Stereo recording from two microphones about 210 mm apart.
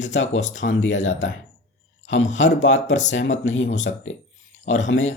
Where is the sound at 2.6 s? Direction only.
65° left (ahead or behind).